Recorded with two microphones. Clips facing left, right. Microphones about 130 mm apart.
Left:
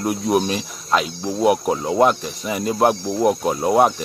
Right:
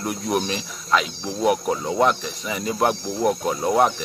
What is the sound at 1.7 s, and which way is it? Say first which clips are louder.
Cricket: left 4 dB; 5° left (ahead or behind).